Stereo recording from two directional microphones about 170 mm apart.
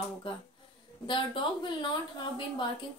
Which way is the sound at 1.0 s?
30° left (ahead or behind).